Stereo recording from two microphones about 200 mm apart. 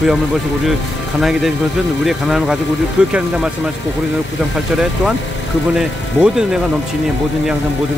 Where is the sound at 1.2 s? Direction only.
Centre (ahead or behind).